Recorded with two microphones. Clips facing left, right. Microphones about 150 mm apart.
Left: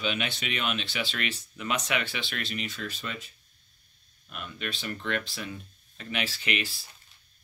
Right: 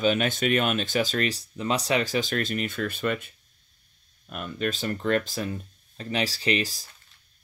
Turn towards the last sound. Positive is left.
turn(degrees=-40)  # may be behind; listen again after turning